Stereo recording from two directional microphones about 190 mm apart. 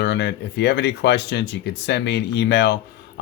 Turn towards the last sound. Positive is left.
turn(degrees=65)  # may be behind; listen again after turning